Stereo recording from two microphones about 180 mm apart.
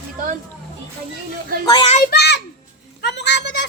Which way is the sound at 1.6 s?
30° left (ahead or behind).